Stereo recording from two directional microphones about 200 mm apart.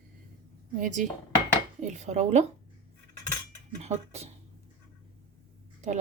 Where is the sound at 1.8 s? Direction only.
35° right (ahead or behind).